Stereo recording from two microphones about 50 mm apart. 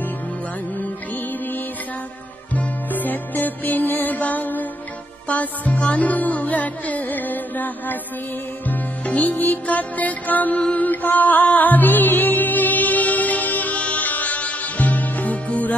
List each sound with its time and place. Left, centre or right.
2.5 s music: left